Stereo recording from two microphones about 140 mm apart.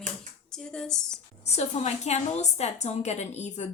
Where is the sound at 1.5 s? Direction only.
50° left (ahead or behind).